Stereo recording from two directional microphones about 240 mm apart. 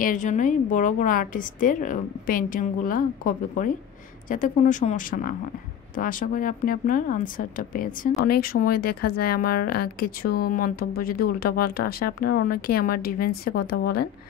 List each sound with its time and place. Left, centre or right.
0.0 s a woman's voice: left